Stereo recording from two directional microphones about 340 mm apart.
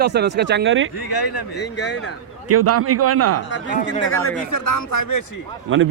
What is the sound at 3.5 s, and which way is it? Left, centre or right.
Speech, left.